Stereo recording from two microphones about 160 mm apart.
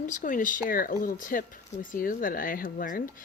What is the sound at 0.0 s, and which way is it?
Speech, 55° left (ahead or behind).